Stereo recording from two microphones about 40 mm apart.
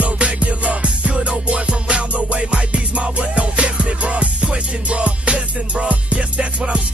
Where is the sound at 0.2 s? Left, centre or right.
Right.